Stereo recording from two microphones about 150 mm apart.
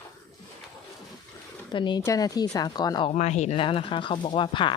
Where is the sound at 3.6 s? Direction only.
35° left (ahead or behind).